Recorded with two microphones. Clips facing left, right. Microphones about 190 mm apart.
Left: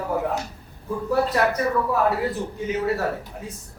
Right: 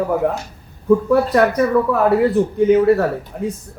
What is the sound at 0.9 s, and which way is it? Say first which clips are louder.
Speech: right 9 dB; 55° right (ahead or behind).